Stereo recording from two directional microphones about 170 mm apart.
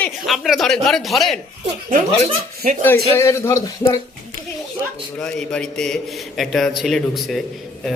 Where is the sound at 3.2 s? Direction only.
15° left (ahead or behind).